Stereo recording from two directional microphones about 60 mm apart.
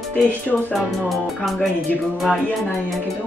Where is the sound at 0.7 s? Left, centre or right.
Centre.